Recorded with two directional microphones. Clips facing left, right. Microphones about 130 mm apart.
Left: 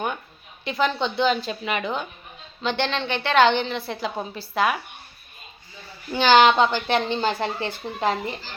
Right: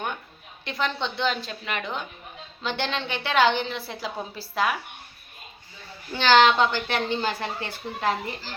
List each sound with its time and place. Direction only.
0.6 s a woman's voice: 5° left (ahead or behind)
6.1 s a woman's voice: 15° left (ahead or behind)